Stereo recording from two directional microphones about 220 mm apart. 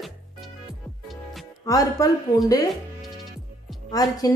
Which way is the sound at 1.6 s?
15° left (ahead or behind).